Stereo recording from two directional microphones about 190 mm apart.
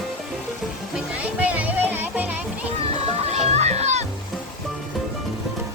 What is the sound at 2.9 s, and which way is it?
Music, 35° right (ahead or behind).